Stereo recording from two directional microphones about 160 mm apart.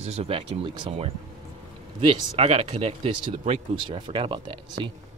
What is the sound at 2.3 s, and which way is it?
Speech, 40° right (ahead or behind).